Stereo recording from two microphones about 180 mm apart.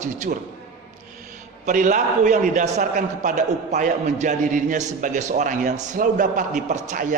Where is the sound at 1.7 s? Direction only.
45° right (ahead or behind).